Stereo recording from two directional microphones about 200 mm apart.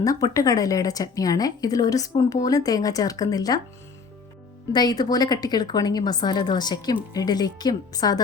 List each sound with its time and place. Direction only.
0.0 s speech: 15° left (ahead or behind)
4.7 s a woman's voice: 20° left (ahead or behind)